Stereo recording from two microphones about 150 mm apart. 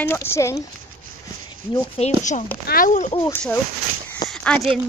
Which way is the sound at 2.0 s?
55° left (ahead or behind).